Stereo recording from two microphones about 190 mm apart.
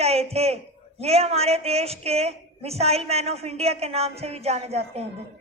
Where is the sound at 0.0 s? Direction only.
35° right (ahead or behind).